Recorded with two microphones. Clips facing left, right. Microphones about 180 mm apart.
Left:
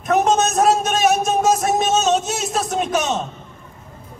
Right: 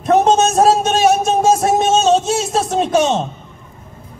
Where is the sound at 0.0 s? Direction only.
30° right (ahead or behind).